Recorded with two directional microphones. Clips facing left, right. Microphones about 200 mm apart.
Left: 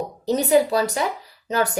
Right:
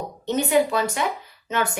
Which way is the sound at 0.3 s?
35° left (ahead or behind).